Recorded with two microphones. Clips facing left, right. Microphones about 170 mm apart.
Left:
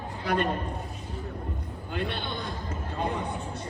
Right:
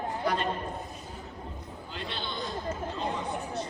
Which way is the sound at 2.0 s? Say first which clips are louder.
Left 4 dB; 55° left (ahead or behind).